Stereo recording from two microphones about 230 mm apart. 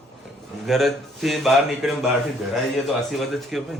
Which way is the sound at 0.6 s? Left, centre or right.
Centre.